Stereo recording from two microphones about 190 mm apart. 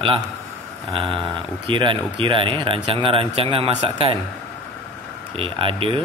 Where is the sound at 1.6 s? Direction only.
25° right (ahead or behind).